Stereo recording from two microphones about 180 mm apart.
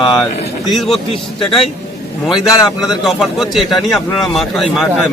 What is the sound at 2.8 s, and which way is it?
Speech, centre (ahead or behind).